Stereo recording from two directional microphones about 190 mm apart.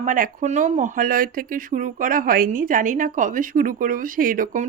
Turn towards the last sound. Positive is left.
turn(degrees=-45)  # may be behind; listen again after turning